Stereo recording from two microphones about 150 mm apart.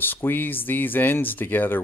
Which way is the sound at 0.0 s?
15° left (ahead or behind).